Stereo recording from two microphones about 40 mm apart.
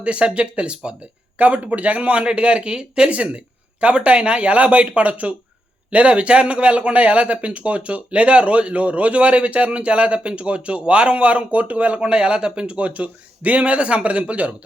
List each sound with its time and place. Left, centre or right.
0.0 s a man's voice: right
1.4 s a man's voice: right
3.1 s a man's voice: right
11.9 s a man's voice: right